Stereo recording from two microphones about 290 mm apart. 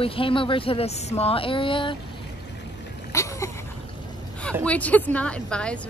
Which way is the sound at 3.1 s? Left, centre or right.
Centre.